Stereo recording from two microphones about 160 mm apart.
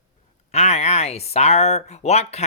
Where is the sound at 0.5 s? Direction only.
45° left (ahead or behind).